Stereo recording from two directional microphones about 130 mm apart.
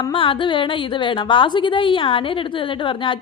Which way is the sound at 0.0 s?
40° left (ahead or behind).